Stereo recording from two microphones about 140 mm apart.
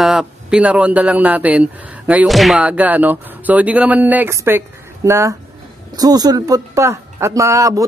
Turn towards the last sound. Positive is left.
turn(degrees=-25)  # may be behind; listen again after turning